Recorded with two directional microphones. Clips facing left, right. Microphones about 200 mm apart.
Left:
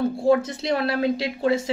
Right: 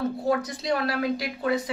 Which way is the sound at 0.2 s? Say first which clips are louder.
Left 6 dB; 25° left (ahead or behind).